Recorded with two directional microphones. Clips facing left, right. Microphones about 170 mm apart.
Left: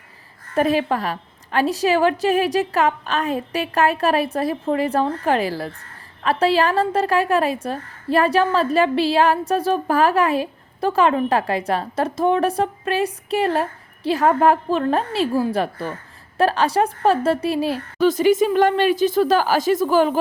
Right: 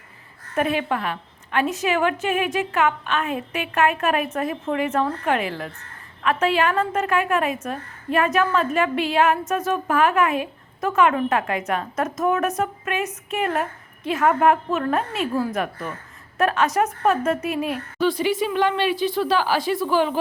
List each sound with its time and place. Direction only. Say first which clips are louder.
0.5 s a woman's voice: left 4 dB; 35° left (ahead or behind)
18.1 s speech: left 6 dB; 45° left (ahead or behind)